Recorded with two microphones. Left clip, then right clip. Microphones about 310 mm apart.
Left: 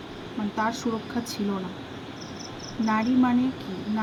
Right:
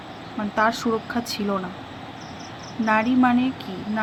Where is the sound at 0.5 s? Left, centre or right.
Centre.